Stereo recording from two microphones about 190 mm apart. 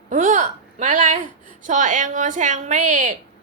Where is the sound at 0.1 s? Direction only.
40° right (ahead or behind).